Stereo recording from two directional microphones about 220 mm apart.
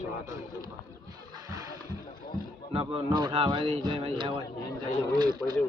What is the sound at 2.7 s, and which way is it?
Speech, 25° right (ahead or behind).